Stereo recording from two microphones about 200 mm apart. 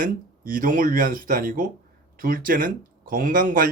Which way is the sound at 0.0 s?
45° right (ahead or behind).